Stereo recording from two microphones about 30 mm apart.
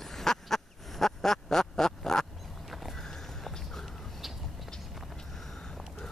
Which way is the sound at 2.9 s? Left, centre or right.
Centre.